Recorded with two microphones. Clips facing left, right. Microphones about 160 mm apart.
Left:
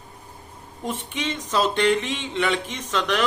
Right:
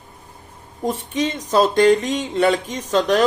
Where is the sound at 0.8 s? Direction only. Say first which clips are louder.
Right 7 dB; 35° right (ahead or behind).